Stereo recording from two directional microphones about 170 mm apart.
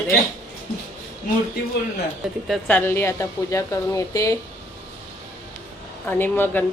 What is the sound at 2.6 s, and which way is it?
A woman's voice, 10° left (ahead or behind).